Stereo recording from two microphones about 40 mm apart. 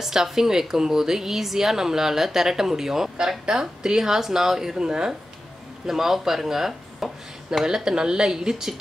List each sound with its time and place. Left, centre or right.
0.0 s speech: centre